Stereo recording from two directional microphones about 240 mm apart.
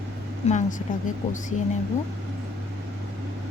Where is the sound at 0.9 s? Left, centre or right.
Left.